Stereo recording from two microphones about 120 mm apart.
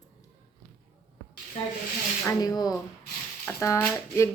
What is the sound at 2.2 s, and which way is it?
Speech, 35° left (ahead or behind).